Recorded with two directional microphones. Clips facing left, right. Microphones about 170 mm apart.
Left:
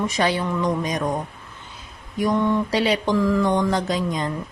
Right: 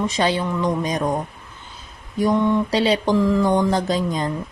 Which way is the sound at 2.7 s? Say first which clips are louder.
Right 2 dB; 30° right (ahead or behind).